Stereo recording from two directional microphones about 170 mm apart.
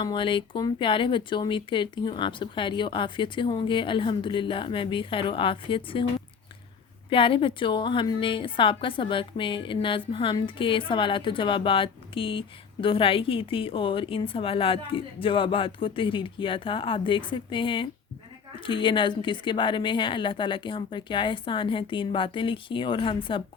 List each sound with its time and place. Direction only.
0.0 s speech: 30° left (ahead or behind)
7.1 s a woman's voice: 30° left (ahead or behind)